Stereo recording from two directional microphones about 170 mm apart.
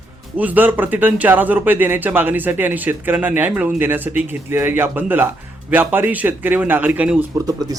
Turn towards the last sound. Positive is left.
turn(degrees=-20)  # may be behind; listen again after turning